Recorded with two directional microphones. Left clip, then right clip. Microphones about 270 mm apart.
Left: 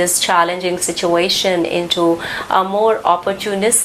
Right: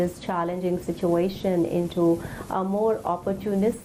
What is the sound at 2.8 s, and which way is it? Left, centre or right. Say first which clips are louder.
Speech: left 11 dB; centre.